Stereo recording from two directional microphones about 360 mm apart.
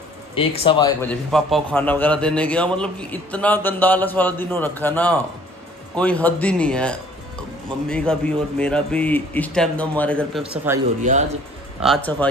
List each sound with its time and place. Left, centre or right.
0.3 s speech: centre
1.3 s a man's voice: centre
11.1 s a man's voice: right
11.8 s a man's voice: centre